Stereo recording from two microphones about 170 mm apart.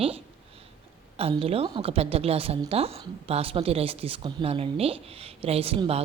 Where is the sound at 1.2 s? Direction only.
35° right (ahead or behind).